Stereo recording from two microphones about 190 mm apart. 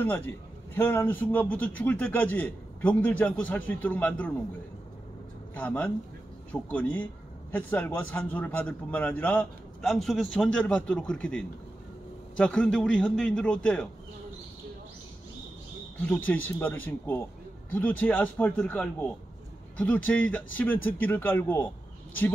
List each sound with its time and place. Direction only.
0.0 s a man's voice: 10° left (ahead or behind)
5.5 s a man's voice: 5° left (ahead or behind)
16.1 s a man's voice: 10° left (ahead or behind)